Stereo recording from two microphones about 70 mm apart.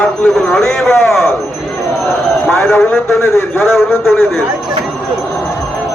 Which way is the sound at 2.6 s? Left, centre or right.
Left.